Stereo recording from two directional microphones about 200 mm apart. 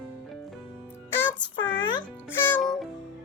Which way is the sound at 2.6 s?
Centre (ahead or behind).